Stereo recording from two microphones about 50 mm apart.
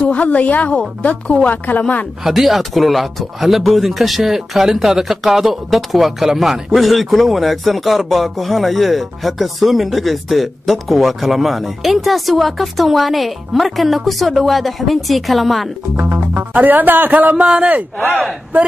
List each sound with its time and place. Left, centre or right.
0.1 s a woman's voice: left
2.2 s speech: centre
16.0 s music: right
16.5 s a man's voice: right
17.5 s speech: centre